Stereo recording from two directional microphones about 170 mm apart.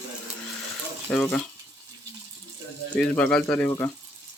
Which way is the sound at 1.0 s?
10° left (ahead or behind).